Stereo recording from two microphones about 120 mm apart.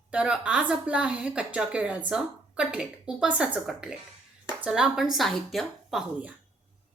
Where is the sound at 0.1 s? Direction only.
10° right (ahead or behind).